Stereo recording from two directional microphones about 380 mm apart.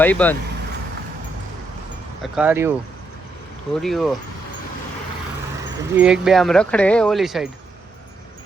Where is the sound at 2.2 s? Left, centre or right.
Centre.